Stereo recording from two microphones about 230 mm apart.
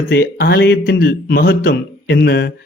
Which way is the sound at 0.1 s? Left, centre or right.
Left.